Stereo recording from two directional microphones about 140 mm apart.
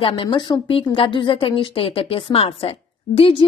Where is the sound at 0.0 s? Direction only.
35° left (ahead or behind).